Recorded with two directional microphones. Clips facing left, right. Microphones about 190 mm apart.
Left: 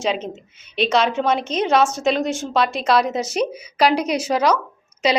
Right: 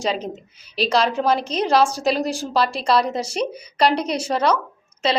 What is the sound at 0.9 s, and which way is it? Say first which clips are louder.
Speech: even; centre (ahead or behind).